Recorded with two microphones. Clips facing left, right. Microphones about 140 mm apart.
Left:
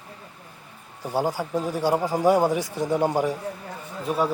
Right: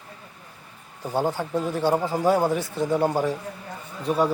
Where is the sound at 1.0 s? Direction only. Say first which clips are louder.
Even; 10° left (ahead or behind).